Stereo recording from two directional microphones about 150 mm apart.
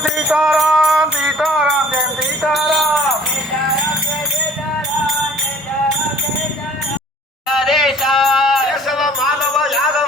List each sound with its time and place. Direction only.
0.3 s music: 5° right (ahead or behind)
7.5 s music: centre (ahead or behind)